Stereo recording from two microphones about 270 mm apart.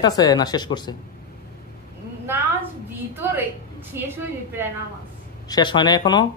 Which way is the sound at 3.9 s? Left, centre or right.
Centre.